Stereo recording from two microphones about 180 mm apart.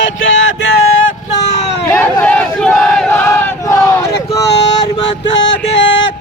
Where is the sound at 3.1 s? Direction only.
10° left (ahead or behind).